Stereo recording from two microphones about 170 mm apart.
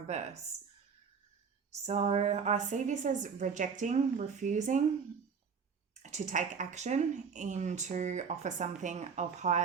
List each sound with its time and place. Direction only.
0.1 s speech: 40° right (ahead or behind)
1.9 s speech: 40° right (ahead or behind)
5.9 s speech: 45° right (ahead or behind)